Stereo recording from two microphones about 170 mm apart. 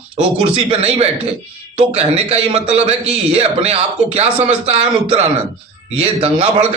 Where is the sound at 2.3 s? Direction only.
35° right (ahead or behind).